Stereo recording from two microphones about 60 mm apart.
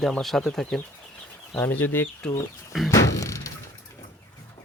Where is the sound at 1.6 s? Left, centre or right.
Left.